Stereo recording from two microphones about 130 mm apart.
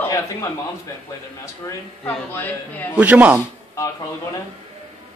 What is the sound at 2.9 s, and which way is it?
Speech, 10° right (ahead or behind).